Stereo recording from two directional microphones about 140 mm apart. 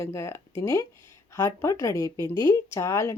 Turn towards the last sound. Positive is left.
turn(degrees=20)  # may be behind; listen again after turning